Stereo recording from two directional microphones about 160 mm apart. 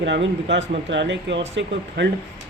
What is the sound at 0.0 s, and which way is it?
A man's voice, 90° right.